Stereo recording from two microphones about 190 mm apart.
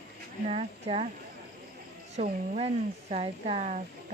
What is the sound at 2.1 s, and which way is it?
Speech, 35° right (ahead or behind).